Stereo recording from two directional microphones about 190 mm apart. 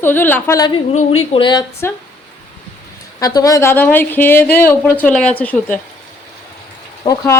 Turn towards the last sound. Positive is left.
turn(degrees=20)  # may be behind; listen again after turning